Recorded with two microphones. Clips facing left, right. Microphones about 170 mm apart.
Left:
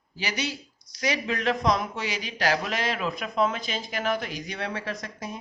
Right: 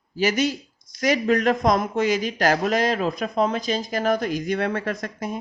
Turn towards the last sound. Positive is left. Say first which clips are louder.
# right 6 dB
turn(degrees=-55)  # may be behind; listen again after turning